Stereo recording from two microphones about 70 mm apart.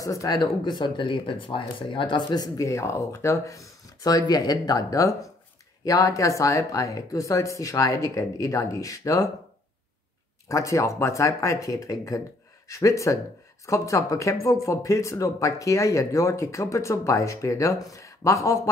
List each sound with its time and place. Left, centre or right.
0.0 s speech: left
0.4 s speech: left
2.0 s speech: left
2.6 s speech: left
10.5 s speech: left